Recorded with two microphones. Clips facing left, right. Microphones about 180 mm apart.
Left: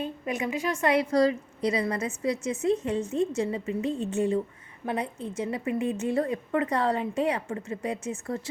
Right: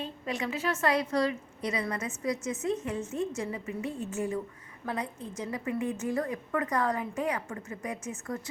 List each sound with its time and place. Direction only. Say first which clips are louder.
0.0 s a woman's voice: left 4 dB; 15° left (ahead or behind)
1.1 s a woman's voice: left 6 dB; 35° left (ahead or behind)
3.8 s speech: left 6 dB; 90° left
4.1 s a woman's voice: left 6 dB; 30° left (ahead or behind)